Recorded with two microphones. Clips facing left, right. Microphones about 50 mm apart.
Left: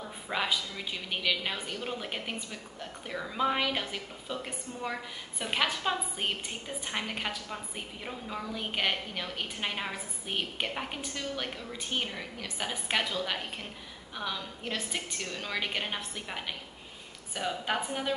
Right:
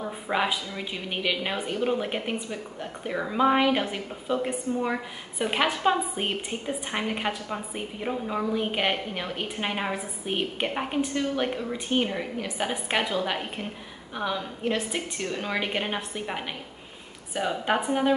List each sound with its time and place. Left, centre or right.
0.3 s a woman's voice: centre